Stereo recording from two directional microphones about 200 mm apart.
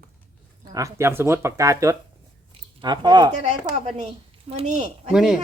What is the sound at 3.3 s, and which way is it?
A woman's voice, 35° right (ahead or behind).